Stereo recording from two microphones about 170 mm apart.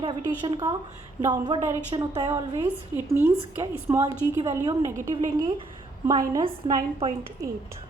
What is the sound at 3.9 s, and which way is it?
A woman's voice, 15° right (ahead or behind).